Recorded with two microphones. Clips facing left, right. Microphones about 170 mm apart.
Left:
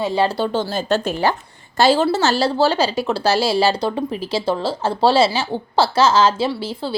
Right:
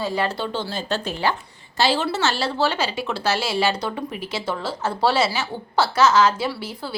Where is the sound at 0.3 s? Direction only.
45° left (ahead or behind).